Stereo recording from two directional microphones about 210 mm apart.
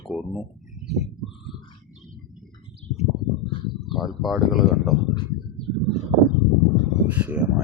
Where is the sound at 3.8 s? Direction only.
Centre (ahead or behind).